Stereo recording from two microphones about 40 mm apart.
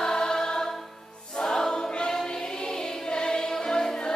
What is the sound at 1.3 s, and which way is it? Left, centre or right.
Music, centre.